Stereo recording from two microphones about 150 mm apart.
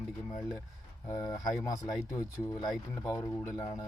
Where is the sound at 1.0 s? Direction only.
20° left (ahead or behind).